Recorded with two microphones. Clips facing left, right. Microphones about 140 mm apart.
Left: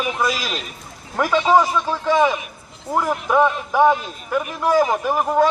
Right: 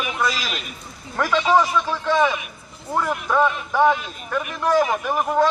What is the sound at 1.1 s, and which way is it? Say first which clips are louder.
A man's voice: left 2 dB; 15° left (ahead or behind).